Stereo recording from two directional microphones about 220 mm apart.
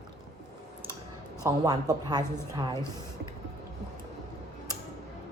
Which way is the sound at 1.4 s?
15° right (ahead or behind).